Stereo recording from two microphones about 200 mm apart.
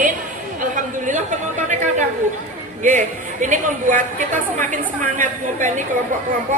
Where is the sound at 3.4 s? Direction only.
40° right (ahead or behind).